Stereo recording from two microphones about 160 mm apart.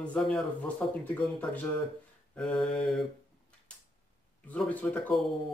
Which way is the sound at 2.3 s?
5° left (ahead or behind).